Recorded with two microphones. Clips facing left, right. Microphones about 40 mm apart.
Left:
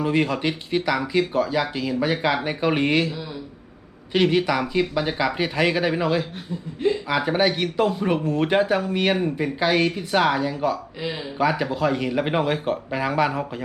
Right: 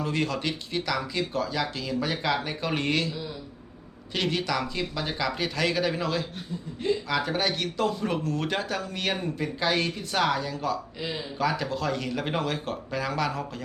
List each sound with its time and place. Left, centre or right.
0.0 s speech: left